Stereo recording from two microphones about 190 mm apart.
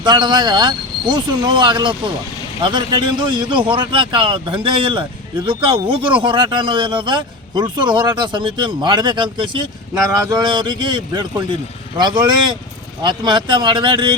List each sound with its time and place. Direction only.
0.0 s speech: 25° right (ahead or behind)